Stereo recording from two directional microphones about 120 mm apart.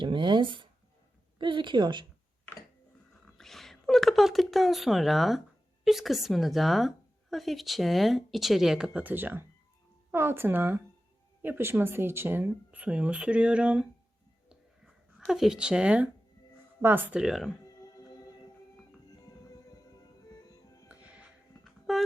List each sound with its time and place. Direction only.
0.0 s a woman's voice: 40° right (ahead or behind)
3.3 s a woman's voice: centre (ahead or behind)
15.3 s speech: 5° right (ahead or behind)
17.2 s a woman's voice: 5° right (ahead or behind)
20.8 s music: 10° right (ahead or behind)
21.6 s a sound: centre (ahead or behind)